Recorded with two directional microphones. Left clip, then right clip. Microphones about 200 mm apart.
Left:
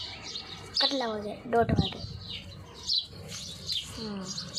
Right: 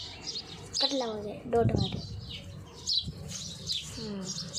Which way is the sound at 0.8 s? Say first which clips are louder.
Right 1 dB; centre (ahead or behind).